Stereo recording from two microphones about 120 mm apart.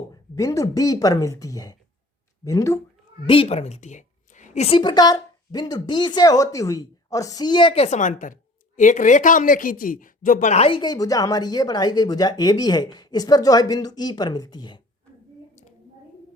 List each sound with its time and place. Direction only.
0.3 s speech: 25° left (ahead or behind)
3.2 s a woman's voice: 50° left (ahead or behind)
4.8 s speech: 35° left (ahead or behind)
7.9 s a woman's voice: 90° left
10.3 s a woman's voice: 80° left
10.7 s speech: 40° left (ahead or behind)